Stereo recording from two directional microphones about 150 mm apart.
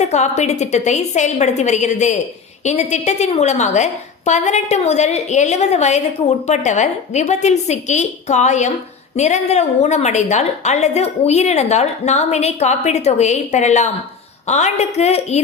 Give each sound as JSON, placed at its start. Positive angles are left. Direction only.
{"t": 0.0, "sound": "a woman's voice", "side_deg": 50}